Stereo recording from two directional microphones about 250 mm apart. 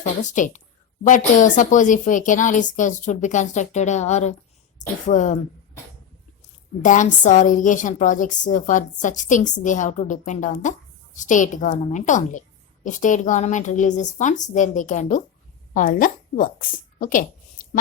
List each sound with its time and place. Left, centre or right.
0.0 s a woman's voice: left
6.8 s a woman's voice: left